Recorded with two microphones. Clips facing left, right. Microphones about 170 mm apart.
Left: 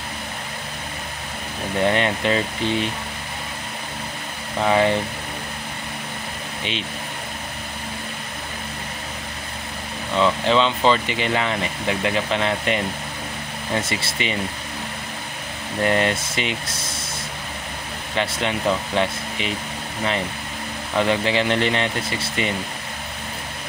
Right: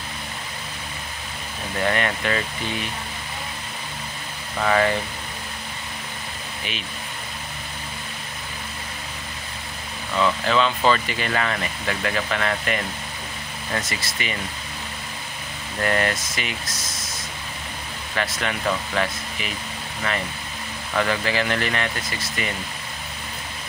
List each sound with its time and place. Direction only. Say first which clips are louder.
1.8 s speech: left 3 dB; 25° left (ahead or behind)
4.6 s speech: left 2 dB; 20° left (ahead or behind)
10.1 s speech: left 2 dB; 25° left (ahead or behind)
15.8 s speech: left 3 dB; 20° left (ahead or behind)
18.1 s speech: left 3 dB; 25° left (ahead or behind)
20.9 s speech: left 3 dB; 25° left (ahead or behind)